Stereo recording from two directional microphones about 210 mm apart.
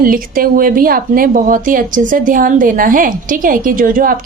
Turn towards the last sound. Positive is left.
turn(degrees=-40)  # may be behind; listen again after turning